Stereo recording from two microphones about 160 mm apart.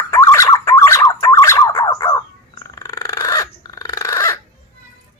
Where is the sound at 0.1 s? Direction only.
20° left (ahead or behind).